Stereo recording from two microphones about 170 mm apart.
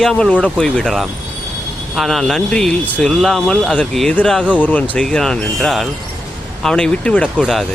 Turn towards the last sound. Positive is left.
turn(degrees=5)  # may be behind; listen again after turning